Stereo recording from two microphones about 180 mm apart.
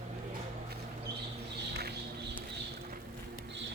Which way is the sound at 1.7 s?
65° right (ahead or behind).